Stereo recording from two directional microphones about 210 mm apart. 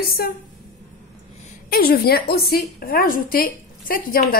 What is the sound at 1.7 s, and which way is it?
A woman's voice, 45° left (ahead or behind).